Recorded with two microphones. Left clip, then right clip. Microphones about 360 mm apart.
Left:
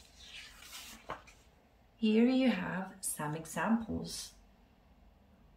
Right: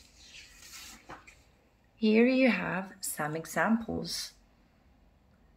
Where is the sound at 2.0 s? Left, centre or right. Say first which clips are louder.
Right 5 dB; centre.